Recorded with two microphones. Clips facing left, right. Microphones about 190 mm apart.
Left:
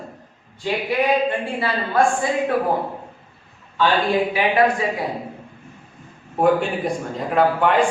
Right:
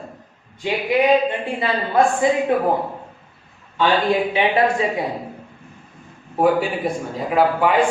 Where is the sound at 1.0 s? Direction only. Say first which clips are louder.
Right 3 dB; 20° right (ahead or behind).